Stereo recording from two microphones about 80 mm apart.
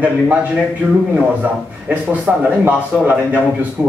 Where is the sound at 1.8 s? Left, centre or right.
Centre.